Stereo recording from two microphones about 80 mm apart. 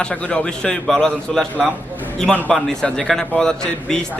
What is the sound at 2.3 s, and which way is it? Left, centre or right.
A man's voice, centre.